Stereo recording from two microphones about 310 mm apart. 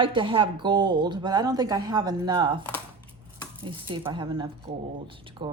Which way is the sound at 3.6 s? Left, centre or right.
Centre.